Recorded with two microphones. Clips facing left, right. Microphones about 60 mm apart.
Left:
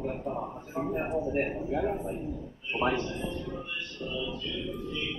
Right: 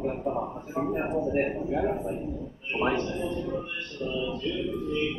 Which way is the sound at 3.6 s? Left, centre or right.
Right.